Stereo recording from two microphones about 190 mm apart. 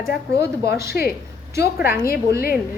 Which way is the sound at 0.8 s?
55° left (ahead or behind).